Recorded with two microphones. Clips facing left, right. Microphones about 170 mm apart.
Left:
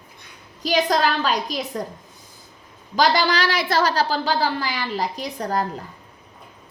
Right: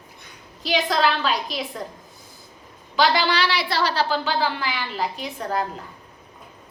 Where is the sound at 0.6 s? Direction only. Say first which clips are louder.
Left 2 dB; 40° left (ahead or behind).